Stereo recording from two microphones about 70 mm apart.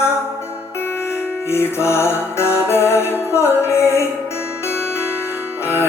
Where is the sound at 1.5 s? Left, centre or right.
Left.